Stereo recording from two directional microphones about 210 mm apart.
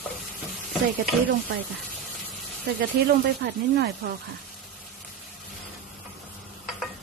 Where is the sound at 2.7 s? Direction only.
50° right (ahead or behind).